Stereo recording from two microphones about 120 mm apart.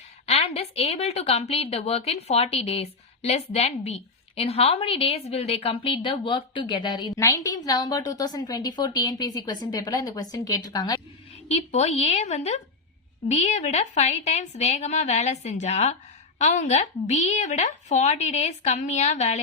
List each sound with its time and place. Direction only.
0.3 s a woman's voice: 60° left (ahead or behind); by 7.1 s 40° left (ahead or behind)
7.2 s a woman's voice: 25° left (ahead or behind)
11.4 s a woman's voice: 60° left (ahead or behind)
16.4 s a woman's voice: 85° left